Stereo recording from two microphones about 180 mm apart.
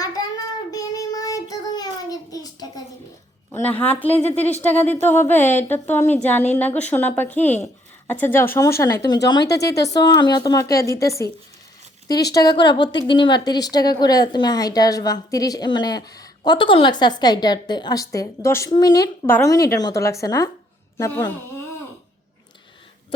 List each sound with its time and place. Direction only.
0.7 s child singing: 20° left (ahead or behind)
3.5 s a woman's voice: 10° left (ahead or behind)
12.3 s a woman's voice: 25° left (ahead or behind)